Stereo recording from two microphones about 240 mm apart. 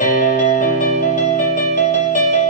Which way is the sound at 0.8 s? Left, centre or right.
Left.